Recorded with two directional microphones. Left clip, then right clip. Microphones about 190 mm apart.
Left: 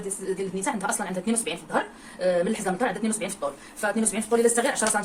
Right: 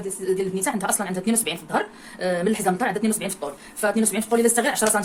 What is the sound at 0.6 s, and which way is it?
A woman's voice, 50° right (ahead or behind).